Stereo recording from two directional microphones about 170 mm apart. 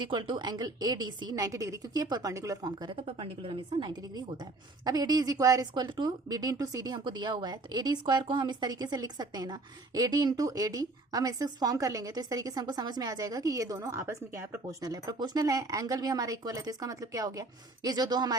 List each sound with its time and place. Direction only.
0.0 s a woman's voice: 25° right (ahead or behind)